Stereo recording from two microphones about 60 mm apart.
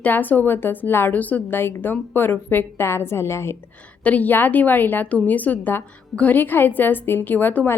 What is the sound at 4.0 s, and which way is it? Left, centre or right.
A woman's voice, left.